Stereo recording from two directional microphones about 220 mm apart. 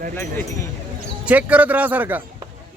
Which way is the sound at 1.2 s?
5° right (ahead or behind).